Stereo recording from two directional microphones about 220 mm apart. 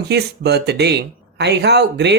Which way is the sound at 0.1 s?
45° right (ahead or behind).